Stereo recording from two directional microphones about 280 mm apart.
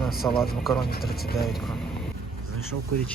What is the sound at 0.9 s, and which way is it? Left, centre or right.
Speech, left.